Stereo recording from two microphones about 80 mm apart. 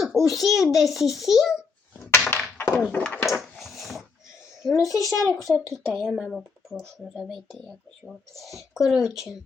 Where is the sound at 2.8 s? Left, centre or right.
Centre.